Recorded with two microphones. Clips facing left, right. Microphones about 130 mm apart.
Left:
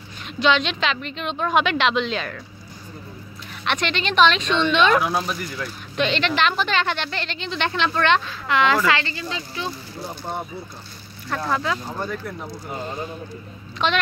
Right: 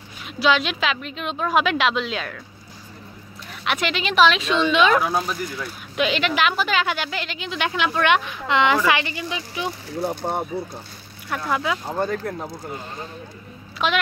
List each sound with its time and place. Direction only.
0.4 s a woman's voice: 5° right (ahead or behind)
3.6 s speech: 5° right (ahead or behind)
10.0 s speech: 60° right (ahead or behind)
11.2 s speech: 10° right (ahead or behind)
12.0 s speech: 45° right (ahead or behind)
13.8 s speech: 5° right (ahead or behind)